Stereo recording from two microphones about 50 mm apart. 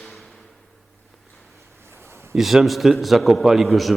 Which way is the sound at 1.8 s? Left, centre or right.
Right.